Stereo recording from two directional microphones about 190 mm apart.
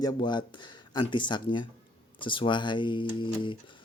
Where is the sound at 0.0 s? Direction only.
20° left (ahead or behind).